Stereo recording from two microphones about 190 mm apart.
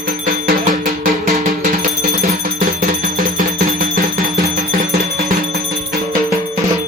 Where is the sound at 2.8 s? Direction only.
50° right (ahead or behind).